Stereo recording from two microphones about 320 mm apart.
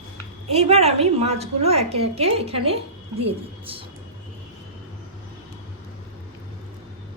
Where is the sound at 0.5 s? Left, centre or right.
Centre.